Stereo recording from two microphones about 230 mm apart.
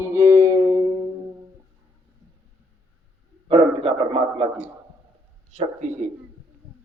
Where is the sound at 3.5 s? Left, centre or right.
Right.